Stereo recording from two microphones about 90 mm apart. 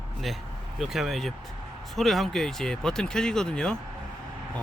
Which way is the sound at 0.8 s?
5° right (ahead or behind).